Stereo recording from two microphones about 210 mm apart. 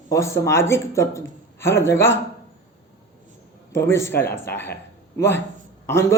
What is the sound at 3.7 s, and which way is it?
A man's voice, 10° left (ahead or behind).